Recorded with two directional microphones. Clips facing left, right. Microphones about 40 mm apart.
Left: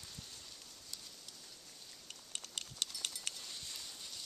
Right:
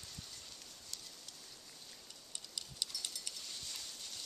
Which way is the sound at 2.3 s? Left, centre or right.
Left.